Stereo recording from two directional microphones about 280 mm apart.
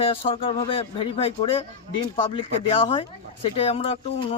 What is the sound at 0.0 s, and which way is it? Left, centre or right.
Speech, centre.